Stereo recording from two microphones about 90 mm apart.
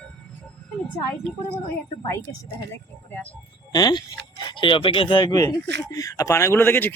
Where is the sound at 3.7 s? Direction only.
55° left (ahead or behind); by 5.2 s 85° left.